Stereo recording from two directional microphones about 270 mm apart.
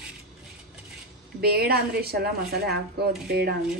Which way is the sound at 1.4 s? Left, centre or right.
Right.